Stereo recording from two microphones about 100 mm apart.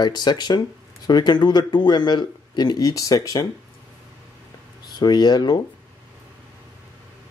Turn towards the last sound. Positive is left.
turn(degrees=45)  # may be behind; listen again after turning